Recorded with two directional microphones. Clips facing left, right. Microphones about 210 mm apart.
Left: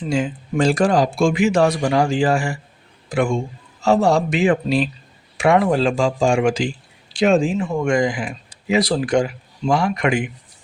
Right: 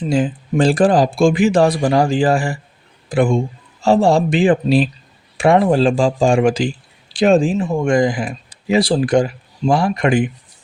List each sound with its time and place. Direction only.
0.1 s speech: 35° right (ahead or behind)